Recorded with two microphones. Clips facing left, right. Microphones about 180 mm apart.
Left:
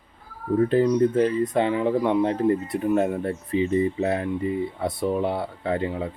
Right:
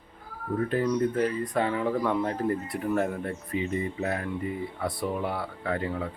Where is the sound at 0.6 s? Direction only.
25° left (ahead or behind).